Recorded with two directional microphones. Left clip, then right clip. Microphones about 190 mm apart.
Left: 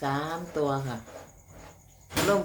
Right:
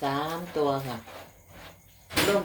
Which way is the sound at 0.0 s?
10° right (ahead or behind).